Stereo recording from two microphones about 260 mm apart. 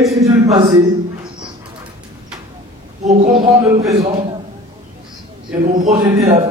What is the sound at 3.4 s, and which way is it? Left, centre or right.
Music, centre.